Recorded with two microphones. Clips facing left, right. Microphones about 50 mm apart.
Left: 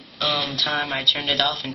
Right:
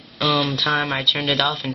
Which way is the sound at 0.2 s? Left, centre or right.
Centre.